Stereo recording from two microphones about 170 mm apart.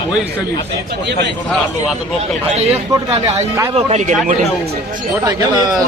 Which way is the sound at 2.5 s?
40° right (ahead or behind).